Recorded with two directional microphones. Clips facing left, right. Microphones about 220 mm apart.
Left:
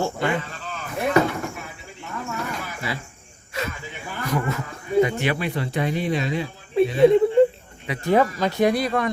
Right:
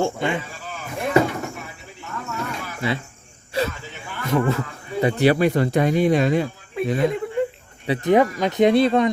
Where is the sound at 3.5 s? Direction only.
30° right (ahead or behind).